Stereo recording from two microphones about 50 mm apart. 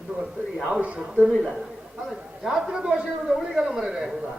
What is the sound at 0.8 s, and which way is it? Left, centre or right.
Speech, right.